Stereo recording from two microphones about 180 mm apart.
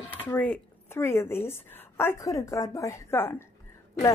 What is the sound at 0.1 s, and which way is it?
Speech, 10° left (ahead or behind).